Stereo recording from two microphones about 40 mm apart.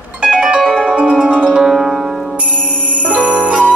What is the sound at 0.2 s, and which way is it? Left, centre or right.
Music, centre.